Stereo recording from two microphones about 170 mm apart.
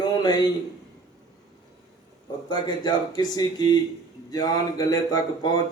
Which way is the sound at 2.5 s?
25° left (ahead or behind).